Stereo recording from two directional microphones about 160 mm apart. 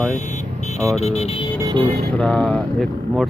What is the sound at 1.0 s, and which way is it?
Speech, 40° left (ahead or behind).